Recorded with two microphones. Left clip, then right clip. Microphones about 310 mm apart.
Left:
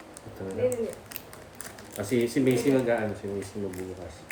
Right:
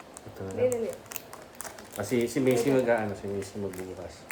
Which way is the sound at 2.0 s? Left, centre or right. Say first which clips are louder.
Left 1 dB; centre.